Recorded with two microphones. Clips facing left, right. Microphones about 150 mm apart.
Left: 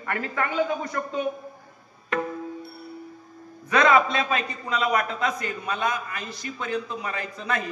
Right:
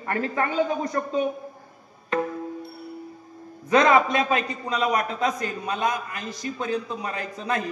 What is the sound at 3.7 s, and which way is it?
A man's voice, 35° right (ahead or behind).